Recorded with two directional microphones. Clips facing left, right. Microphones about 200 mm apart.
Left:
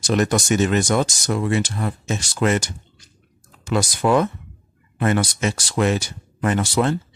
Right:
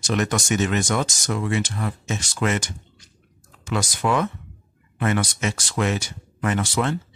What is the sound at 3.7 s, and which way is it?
Speech, 35° left (ahead or behind).